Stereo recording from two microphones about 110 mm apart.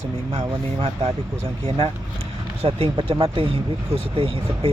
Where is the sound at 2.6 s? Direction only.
55° right (ahead or behind).